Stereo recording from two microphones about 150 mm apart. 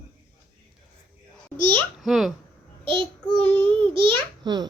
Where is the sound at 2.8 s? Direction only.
35° right (ahead or behind).